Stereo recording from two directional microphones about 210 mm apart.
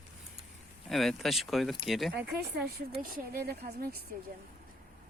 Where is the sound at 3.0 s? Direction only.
45° right (ahead or behind).